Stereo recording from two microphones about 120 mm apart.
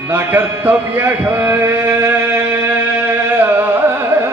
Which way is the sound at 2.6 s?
15° right (ahead or behind).